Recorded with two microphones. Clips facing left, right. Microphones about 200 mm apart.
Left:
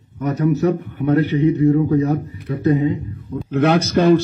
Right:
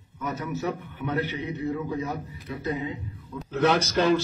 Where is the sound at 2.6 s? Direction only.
50° left (ahead or behind).